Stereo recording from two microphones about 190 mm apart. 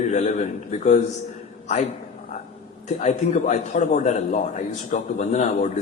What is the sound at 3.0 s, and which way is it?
A man's voice, 40° left (ahead or behind).